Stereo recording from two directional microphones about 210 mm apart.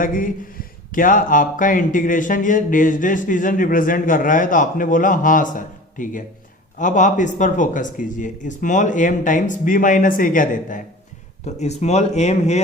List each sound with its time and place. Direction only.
0.0 s speech: 40° left (ahead or behind)